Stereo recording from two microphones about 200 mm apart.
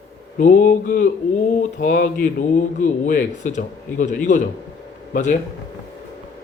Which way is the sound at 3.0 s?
40° left (ahead or behind).